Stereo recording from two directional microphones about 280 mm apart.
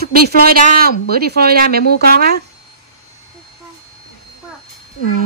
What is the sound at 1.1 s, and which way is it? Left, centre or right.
Speech, right.